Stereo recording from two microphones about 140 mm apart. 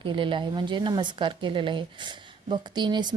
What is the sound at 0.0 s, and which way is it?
A woman's voice, 35° right (ahead or behind).